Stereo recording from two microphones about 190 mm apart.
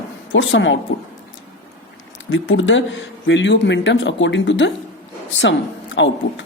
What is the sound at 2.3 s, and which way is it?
Speech, 80° left.